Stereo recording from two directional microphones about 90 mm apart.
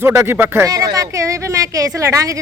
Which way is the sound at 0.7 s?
40° right (ahead or behind).